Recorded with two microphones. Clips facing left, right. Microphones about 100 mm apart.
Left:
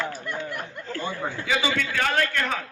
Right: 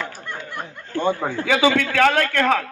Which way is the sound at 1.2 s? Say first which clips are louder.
Right 5 dB; 40° right (ahead or behind).